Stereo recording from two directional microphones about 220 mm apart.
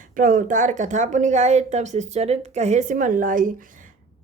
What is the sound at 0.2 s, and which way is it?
A woman's voice, 35° right (ahead or behind).